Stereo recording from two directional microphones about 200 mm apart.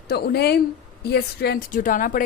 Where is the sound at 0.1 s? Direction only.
55° left (ahead or behind).